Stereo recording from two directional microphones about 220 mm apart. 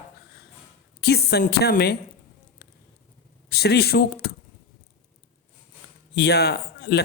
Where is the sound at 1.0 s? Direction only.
45° left (ahead or behind).